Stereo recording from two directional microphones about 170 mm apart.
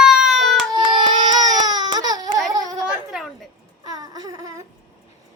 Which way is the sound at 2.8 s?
5° right (ahead or behind).